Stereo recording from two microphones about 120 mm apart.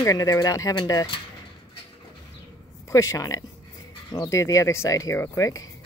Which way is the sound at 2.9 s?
25° left (ahead or behind).